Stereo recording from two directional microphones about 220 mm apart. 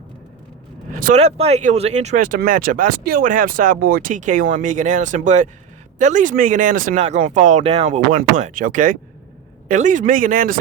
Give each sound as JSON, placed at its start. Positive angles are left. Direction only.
{"t": 0.9, "sound": "speech", "side_deg": -35}